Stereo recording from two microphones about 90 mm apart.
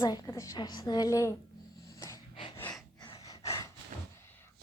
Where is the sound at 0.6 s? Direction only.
50° left (ahead or behind).